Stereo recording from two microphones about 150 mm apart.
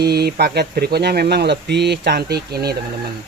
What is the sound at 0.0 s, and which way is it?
Speech, 90° right.